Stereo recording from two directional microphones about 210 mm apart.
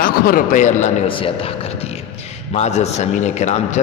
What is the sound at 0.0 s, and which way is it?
A man's voice, 40° left (ahead or behind).